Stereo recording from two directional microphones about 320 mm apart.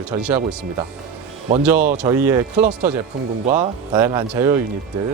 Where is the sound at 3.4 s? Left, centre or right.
Centre.